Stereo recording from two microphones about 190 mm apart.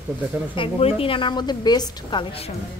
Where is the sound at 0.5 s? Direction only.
30° left (ahead or behind).